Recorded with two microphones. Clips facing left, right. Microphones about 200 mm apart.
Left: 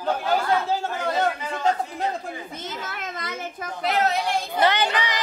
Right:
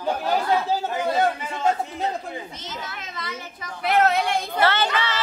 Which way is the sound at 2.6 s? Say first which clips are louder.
Left 2 dB; 55° left (ahead or behind).